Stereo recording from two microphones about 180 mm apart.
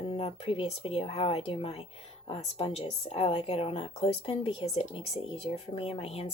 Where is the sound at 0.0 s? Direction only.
30° left (ahead or behind).